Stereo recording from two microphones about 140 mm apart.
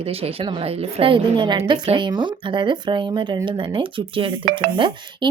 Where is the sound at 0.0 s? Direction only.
45° right (ahead or behind).